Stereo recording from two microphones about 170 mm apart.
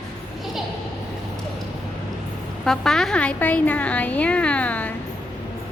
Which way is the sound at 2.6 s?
5° left (ahead or behind).